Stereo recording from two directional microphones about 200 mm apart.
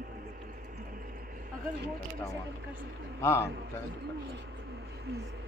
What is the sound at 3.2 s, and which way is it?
Speech, 10° left (ahead or behind).